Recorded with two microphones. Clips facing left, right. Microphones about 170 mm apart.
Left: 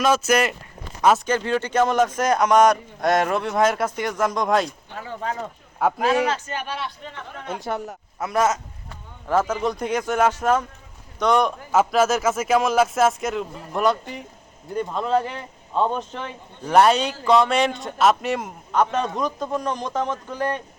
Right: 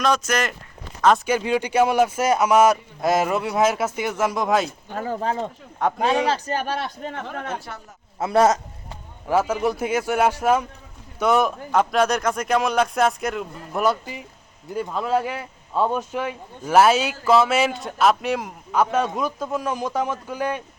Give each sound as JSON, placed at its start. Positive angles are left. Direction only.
{"t": 0.0, "sound": "speech", "side_deg": 5}
{"t": 1.2, "sound": "speech", "side_deg": -10}
{"t": 4.9, "sound": "speech", "side_deg": -40}
{"t": 5.8, "sound": "speech", "side_deg": 5}
{"t": 6.2, "sound": "speech", "side_deg": -35}
{"t": 7.7, "sound": "a man's voice", "side_deg": 40}
{"t": 8.2, "sound": "speech", "side_deg": -30}
{"t": 9.3, "sound": "speech", "side_deg": -10}